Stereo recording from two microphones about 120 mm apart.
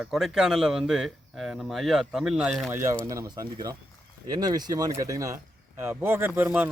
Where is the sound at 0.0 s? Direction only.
5° right (ahead or behind).